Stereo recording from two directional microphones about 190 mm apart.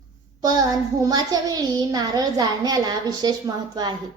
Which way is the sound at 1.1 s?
20° right (ahead or behind).